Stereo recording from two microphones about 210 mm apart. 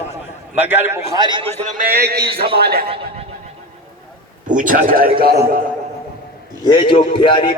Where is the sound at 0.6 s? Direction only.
10° right (ahead or behind).